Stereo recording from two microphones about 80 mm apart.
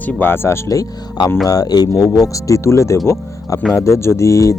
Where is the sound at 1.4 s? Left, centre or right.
Left.